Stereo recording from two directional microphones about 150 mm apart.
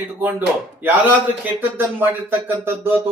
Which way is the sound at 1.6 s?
15° right (ahead or behind).